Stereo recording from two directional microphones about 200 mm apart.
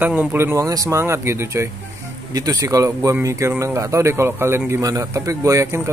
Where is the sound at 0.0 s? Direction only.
10° right (ahead or behind).